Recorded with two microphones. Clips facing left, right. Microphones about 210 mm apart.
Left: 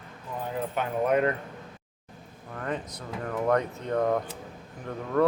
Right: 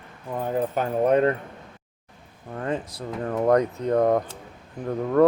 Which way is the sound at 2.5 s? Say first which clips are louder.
Right 5 dB; 30° right (ahead or behind).